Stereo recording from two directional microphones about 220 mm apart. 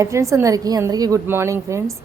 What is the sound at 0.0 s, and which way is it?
Speech, 15° right (ahead or behind).